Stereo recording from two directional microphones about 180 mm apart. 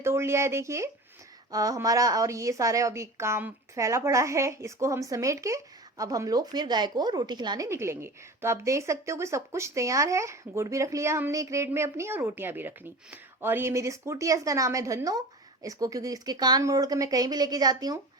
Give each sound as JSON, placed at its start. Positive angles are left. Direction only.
{"t": 0.0, "sound": "a woman's voice", "side_deg": -15}